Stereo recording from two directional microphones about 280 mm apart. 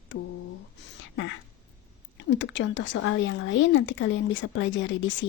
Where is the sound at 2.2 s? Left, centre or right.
Left.